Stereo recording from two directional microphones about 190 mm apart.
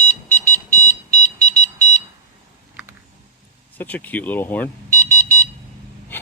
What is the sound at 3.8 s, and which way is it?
Speech, 10° left (ahead or behind).